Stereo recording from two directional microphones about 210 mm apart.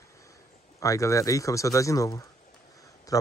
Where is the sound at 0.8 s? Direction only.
15° left (ahead or behind).